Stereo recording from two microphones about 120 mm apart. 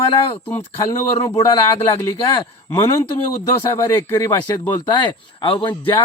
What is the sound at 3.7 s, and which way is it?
Speech, 25° left (ahead or behind).